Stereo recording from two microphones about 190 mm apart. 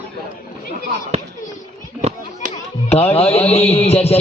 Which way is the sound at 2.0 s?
35° right (ahead or behind).